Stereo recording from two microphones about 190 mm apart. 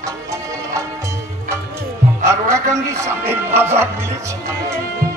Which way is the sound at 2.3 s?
15° right (ahead or behind).